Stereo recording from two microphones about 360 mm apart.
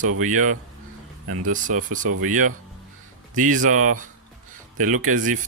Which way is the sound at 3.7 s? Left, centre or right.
Right.